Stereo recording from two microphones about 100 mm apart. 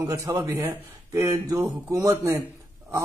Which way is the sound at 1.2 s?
35° right (ahead or behind).